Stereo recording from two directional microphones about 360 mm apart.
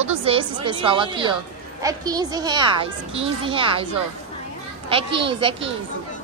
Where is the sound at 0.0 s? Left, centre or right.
Centre.